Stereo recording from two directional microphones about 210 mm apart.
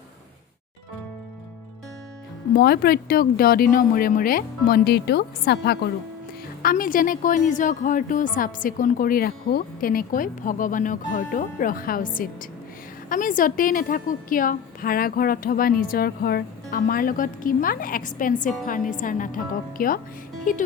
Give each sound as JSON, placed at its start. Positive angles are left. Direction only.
{"t": 2.6, "sound": "a woman's voice", "side_deg": 45}
{"t": 20.4, "sound": "music", "side_deg": 40}